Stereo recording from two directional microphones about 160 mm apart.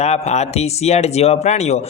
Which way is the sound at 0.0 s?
45° left (ahead or behind).